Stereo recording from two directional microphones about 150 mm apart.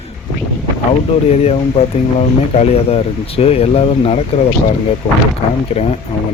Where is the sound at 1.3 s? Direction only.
45° left (ahead or behind).